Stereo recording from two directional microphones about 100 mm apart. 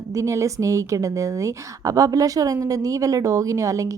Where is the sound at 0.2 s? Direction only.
30° right (ahead or behind).